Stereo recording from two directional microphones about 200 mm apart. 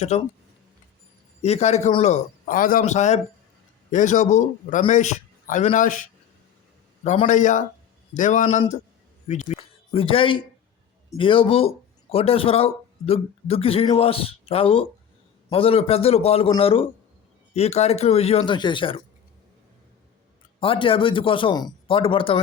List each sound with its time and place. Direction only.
0.1 s a man's voice: 35° left (ahead or behind)
1.4 s a man's voice: 35° left (ahead or behind)
9.5 s a sound: 30° left (ahead or behind)
11.1 s a man's voice: 25° left (ahead or behind)
20.6 s speech: 25° left (ahead or behind)